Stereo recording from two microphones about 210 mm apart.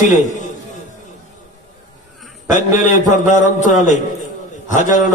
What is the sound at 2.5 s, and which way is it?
A man's voice, 35° left (ahead or behind).